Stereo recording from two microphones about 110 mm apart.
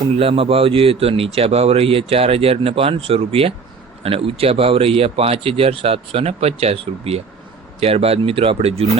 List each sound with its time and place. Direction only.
0.2 s speech: 60° right (ahead or behind)